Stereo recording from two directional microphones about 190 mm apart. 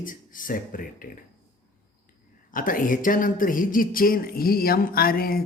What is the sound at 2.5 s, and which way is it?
Speech, 45° left (ahead or behind).